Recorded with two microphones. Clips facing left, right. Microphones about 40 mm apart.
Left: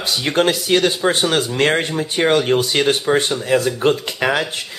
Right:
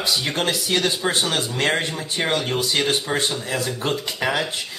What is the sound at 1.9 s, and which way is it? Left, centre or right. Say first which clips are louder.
Speech: left 6 dB; centre.